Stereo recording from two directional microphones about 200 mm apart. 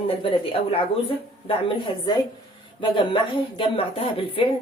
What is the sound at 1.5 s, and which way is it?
Speech, 25° left (ahead or behind).